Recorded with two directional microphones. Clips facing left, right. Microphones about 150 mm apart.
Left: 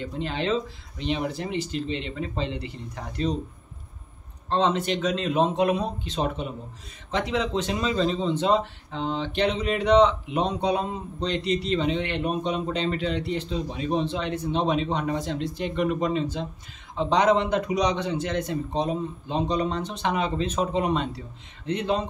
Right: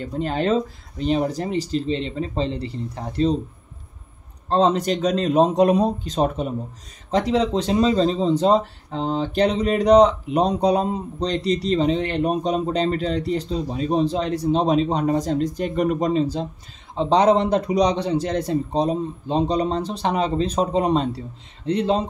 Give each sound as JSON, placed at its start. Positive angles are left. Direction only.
{"t": 0.0, "sound": "speech", "side_deg": -45}
{"t": 4.5, "sound": "speech", "side_deg": -35}